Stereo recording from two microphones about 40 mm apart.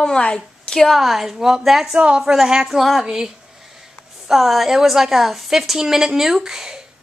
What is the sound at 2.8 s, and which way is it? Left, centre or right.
Speech, centre.